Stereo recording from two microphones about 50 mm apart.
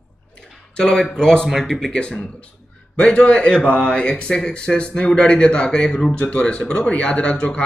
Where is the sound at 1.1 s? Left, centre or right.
Centre.